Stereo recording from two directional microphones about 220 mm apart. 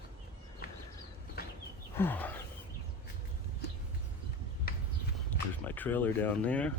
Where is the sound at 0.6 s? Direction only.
45° left (ahead or behind).